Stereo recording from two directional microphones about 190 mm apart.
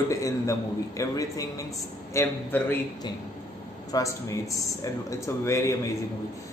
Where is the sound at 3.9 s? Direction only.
15° left (ahead or behind).